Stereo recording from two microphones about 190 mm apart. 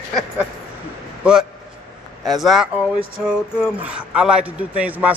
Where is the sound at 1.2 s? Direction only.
5° right (ahead or behind).